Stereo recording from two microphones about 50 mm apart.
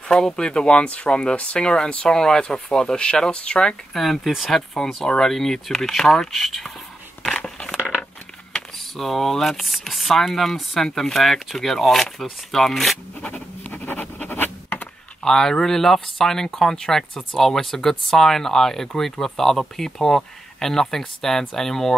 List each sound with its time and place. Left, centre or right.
0.1 s speech: centre
3.9 s speech: centre
6.3 s speech: centre
8.7 s speech: centre
13.2 s scratch: left
14.3 s a sound: left
15.2 s speech: centre